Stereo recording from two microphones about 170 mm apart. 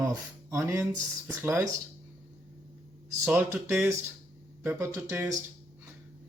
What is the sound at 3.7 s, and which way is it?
Speech, 15° right (ahead or behind).